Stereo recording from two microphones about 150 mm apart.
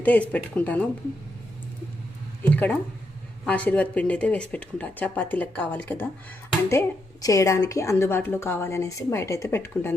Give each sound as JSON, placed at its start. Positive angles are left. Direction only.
{"t": 0.0, "sound": "speech", "side_deg": 10}
{"t": 2.4, "sound": "a sound", "side_deg": 10}
{"t": 3.4, "sound": "a woman's voice", "side_deg": 10}